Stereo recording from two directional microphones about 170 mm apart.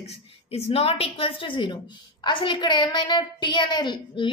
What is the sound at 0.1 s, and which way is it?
A woman's voice, 35° left (ahead or behind).